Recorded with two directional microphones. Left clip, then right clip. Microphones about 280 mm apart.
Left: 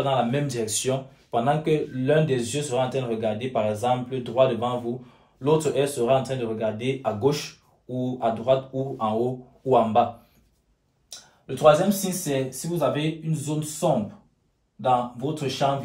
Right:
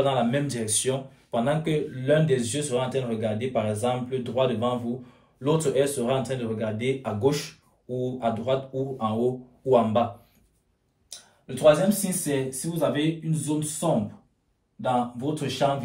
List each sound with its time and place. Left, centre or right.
0.0 s speech: centre
11.4 s speech: centre